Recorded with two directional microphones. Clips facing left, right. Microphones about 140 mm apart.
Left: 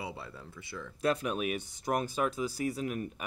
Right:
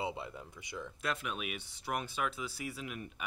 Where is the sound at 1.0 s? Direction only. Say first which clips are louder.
Left 9 dB; 40° left (ahead or behind).